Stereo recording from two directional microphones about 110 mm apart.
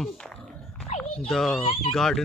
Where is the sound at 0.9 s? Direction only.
65° left (ahead or behind).